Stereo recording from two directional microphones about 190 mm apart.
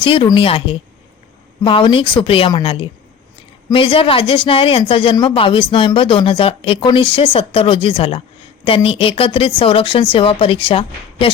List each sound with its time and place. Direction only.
0.0 s speech: 25° left (ahead or behind)